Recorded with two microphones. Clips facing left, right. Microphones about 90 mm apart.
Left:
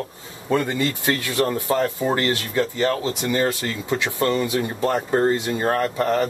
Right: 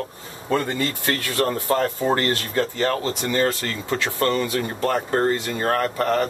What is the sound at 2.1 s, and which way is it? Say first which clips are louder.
Speech: even; 45° right (ahead or behind).